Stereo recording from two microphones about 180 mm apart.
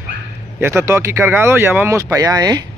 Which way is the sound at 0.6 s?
10° right (ahead or behind).